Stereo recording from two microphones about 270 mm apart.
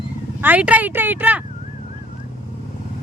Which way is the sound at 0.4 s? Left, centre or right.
Centre.